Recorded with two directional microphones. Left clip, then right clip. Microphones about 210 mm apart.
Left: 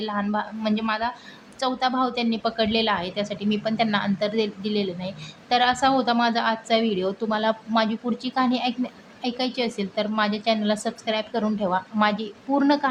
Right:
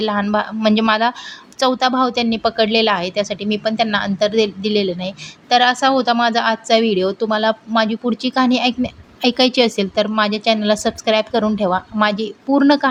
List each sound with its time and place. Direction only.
0.0 s a woman's voice: 35° right (ahead or behind)